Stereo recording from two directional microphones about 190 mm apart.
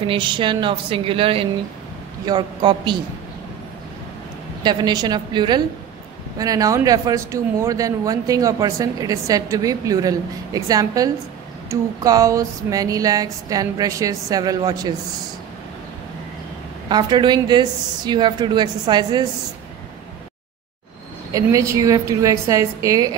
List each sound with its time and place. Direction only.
0.0 s speech: 25° right (ahead or behind)
4.6 s speech: 20° right (ahead or behind)
16.9 s speech: 25° right (ahead or behind)
21.3 s a woman's voice: 15° right (ahead or behind)